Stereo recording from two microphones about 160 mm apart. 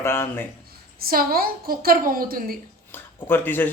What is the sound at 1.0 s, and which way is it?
A woman's voice, 70° right (ahead or behind).